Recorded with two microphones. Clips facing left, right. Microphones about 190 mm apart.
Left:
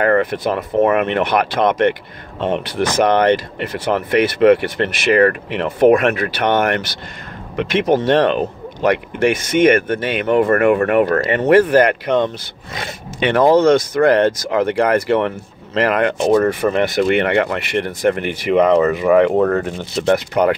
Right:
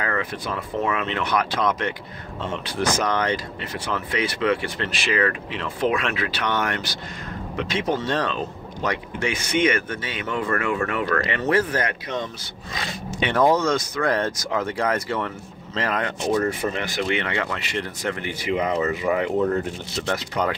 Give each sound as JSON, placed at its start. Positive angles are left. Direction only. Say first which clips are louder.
{"t": 0.0, "sound": "speech", "louder": "left 12 dB", "side_deg": 60}